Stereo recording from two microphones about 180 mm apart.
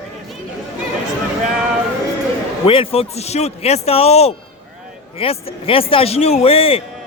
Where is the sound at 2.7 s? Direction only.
30° left (ahead or behind).